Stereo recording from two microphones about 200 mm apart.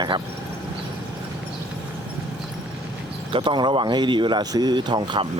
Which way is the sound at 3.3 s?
25° right (ahead or behind).